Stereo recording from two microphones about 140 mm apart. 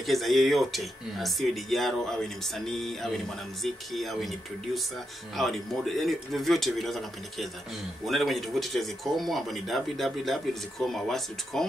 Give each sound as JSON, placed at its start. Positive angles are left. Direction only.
{"t": 0.0, "sound": "speech", "side_deg": 0}